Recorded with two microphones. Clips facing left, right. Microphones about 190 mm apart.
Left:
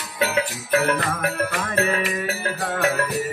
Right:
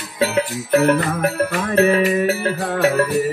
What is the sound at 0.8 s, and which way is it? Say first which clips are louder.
Jingle bell: right 6 dB; 30° right (ahead or behind).